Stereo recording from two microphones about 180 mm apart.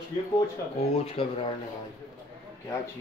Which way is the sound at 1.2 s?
30° left (ahead or behind).